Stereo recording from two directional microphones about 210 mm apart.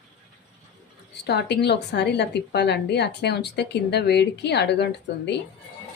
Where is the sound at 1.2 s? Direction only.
50° left (ahead or behind).